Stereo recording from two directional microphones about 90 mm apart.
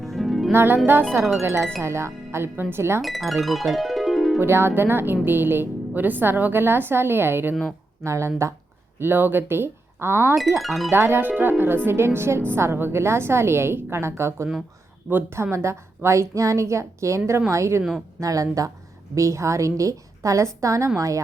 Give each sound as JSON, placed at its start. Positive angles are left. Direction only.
{"t": 0.0, "sound": "harp", "side_deg": 0}
{"t": 0.5, "sound": "a woman's voice", "side_deg": -25}
{"t": 3.0, "sound": "speech", "side_deg": 0}
{"t": 3.4, "sound": "music", "side_deg": 0}
{"t": 4.4, "sound": "a woman's voice", "side_deg": -25}
{"t": 9.0, "sound": "speech", "side_deg": -25}
{"t": 10.6, "sound": "speech", "side_deg": 0}
{"t": 10.9, "sound": "a woman's voice", "side_deg": -25}